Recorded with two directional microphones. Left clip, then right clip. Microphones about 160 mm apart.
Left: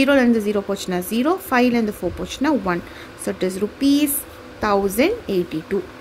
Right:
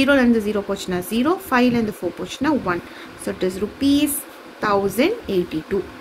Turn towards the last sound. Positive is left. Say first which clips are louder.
# even
turn(degrees=25)  # may be behind; listen again after turning